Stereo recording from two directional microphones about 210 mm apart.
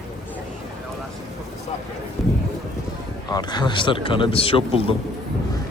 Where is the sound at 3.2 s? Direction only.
20° left (ahead or behind).